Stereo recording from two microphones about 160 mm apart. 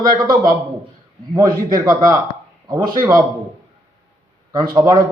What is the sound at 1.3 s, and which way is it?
Speech, 25° right (ahead or behind).